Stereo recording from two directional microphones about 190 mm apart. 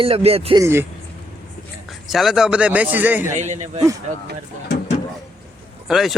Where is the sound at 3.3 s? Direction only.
40° right (ahead or behind).